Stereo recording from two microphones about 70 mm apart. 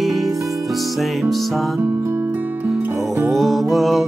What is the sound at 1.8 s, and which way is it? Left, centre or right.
Music, right.